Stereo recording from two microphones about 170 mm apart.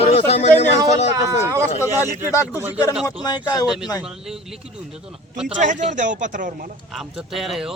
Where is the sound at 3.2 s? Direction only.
20° left (ahead or behind).